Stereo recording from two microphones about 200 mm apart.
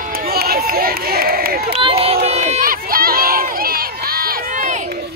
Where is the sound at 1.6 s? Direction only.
30° right (ahead or behind).